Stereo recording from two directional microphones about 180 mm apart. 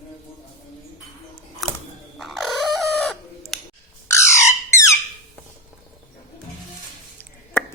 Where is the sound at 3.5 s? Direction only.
Centre (ahead or behind).